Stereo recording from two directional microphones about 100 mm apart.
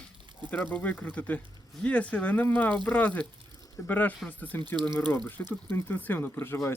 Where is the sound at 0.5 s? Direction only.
15° left (ahead or behind).